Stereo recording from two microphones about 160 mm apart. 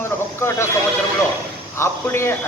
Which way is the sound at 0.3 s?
15° left (ahead or behind).